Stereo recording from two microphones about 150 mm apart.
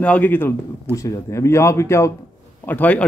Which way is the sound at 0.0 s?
10° left (ahead or behind).